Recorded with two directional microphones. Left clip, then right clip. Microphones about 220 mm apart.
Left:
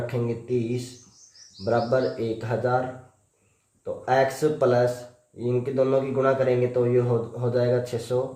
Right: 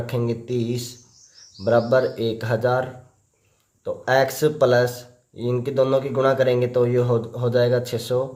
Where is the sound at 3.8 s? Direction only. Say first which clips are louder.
Right 3 dB; 40° right (ahead or behind).